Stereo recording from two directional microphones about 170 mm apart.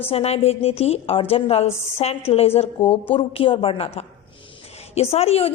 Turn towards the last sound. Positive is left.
turn(degrees=35)  # may be behind; listen again after turning